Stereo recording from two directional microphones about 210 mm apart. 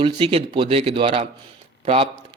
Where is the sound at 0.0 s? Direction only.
25° right (ahead or behind).